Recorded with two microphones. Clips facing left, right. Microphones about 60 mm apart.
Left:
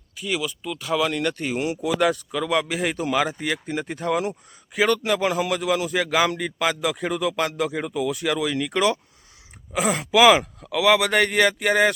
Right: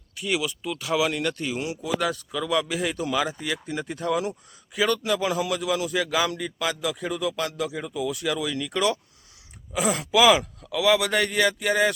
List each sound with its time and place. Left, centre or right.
0.2 s speech: centre
1.5 s speech: left
4.8 s speech: left
10.1 s speech: left
10.7 s speech: left